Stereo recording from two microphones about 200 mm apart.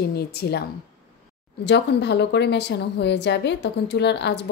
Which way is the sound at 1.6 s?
60° left (ahead or behind).